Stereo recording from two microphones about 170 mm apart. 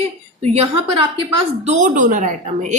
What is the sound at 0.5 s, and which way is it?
Speech, 35° right (ahead or behind).